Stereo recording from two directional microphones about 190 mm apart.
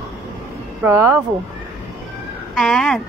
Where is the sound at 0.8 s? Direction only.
15° right (ahead or behind).